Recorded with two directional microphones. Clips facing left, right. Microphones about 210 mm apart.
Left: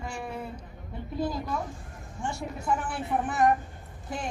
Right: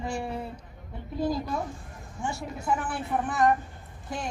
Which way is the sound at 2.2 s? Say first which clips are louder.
Even; centre (ahead or behind).